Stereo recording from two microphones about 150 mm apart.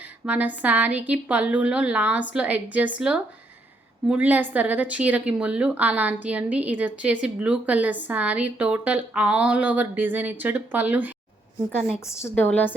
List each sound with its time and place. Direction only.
0.3 s a woman's voice: 10° right (ahead or behind)
11.9 s a woman's voice: 20° left (ahead or behind)